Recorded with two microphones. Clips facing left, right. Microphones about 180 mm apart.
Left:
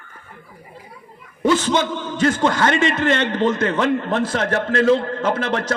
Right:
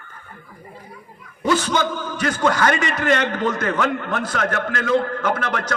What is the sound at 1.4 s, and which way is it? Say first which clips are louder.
A man's voice: left 2 dB; 25° left (ahead or behind).